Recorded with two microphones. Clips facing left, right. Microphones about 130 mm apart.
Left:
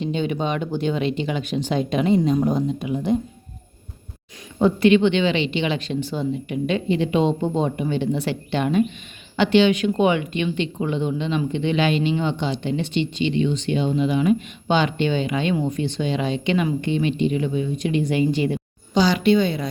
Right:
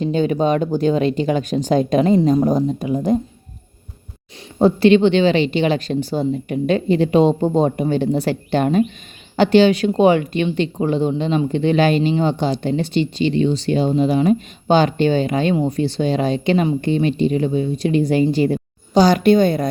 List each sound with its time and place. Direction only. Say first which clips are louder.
0.0 s speech: right 6 dB; 40° right (ahead or behind)
4.6 s speech: right 4 dB; 35° right (ahead or behind)